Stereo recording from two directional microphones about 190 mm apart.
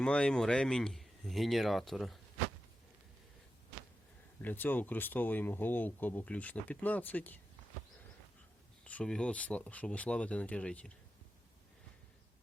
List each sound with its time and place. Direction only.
0.0 s speech: 5° left (ahead or behind)
4.4 s speech: 10° left (ahead or behind)
8.8 s speech: 5° left (ahead or behind)